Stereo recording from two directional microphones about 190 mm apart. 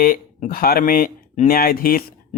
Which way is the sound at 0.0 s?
45° left (ahead or behind).